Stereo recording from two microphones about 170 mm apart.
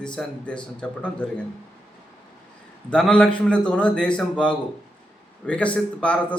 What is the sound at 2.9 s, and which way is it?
A man's voice, 5° left (ahead or behind).